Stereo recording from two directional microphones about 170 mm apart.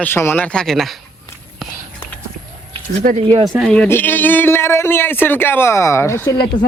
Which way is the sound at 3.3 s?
25° right (ahead or behind).